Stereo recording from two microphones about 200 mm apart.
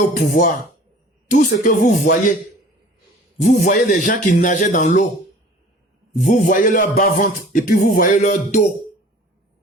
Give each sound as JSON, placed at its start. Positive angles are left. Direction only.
{"t": 0.3, "sound": "music", "side_deg": 40}
{"t": 3.4, "sound": "music", "side_deg": 40}
{"t": 6.1, "sound": "music", "side_deg": 40}